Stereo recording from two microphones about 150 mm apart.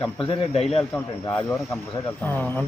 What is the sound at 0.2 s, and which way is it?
Speech, 35° left (ahead or behind).